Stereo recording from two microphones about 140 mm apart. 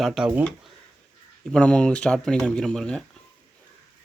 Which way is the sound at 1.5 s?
5° left (ahead or behind).